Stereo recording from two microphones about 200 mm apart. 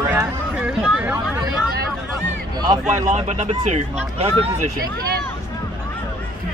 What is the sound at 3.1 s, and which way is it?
Speech, 30° right (ahead or behind).